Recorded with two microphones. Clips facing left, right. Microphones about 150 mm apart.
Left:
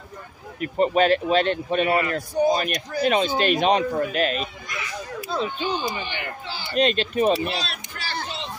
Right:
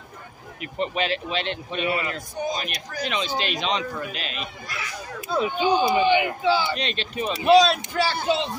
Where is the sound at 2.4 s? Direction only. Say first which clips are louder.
Left 7 dB; 40° left (ahead or behind).